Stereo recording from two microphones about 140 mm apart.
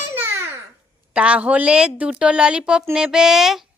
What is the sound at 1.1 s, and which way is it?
A woman's voice, 10° right (ahead or behind).